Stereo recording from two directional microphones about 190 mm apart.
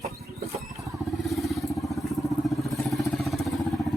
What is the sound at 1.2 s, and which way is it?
Vehicle, centre (ahead or behind).